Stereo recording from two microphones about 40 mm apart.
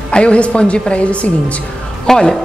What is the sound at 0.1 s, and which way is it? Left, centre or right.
Speech, left.